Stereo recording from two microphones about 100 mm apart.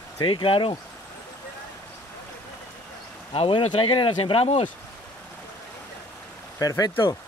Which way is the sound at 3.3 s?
65° left (ahead or behind).